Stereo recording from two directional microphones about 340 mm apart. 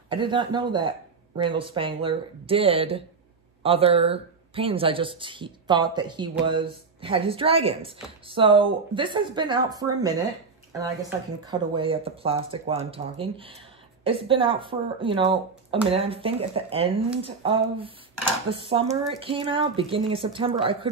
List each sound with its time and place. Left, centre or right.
0.1 s speech: centre